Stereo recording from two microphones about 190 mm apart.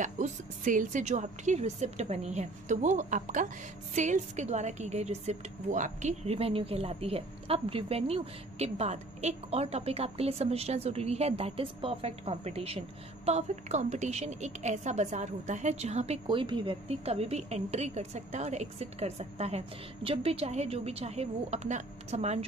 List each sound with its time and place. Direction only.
0.0 s speech: 45° right (ahead or behind)